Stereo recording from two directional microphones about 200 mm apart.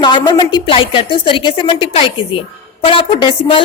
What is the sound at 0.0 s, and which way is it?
A woman's voice, 20° left (ahead or behind).